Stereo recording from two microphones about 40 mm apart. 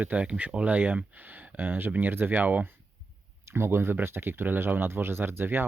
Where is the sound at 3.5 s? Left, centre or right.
Right.